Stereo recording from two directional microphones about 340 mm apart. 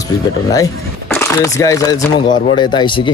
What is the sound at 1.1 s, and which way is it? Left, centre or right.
Speech, centre.